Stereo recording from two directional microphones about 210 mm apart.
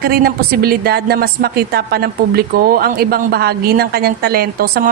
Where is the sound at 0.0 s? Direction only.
45° right (ahead or behind).